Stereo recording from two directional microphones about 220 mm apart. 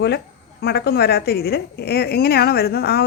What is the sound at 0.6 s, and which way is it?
A woman's voice, 45° left (ahead or behind).